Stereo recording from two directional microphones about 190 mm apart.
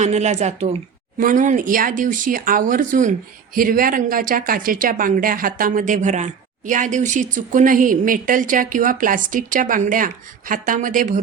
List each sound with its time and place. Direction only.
0.0 s a woman's voice: 35° right (ahead or behind)